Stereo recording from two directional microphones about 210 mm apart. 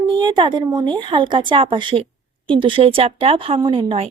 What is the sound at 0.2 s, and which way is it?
Speech, 20° right (ahead or behind).